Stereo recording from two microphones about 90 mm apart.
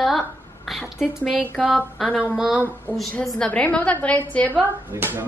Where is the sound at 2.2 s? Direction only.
10° right (ahead or behind).